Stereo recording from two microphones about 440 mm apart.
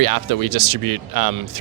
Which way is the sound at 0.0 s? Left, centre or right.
Right.